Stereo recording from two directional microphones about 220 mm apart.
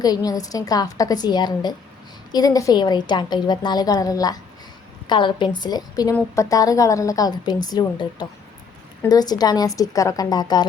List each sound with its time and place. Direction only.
0.0 s a woman's voice: 15° left (ahead or behind)